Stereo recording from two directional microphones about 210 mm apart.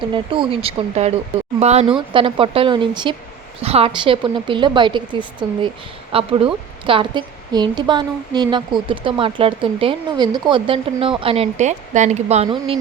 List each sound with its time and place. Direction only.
0.1 s a woman's voice: 25° right (ahead or behind)